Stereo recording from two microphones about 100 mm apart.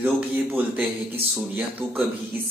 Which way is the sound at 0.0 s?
20° right (ahead or behind).